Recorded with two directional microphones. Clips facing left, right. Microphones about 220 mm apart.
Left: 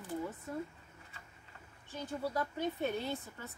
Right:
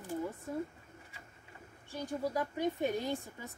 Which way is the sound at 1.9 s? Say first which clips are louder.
Right 2 dB; 15° right (ahead or behind).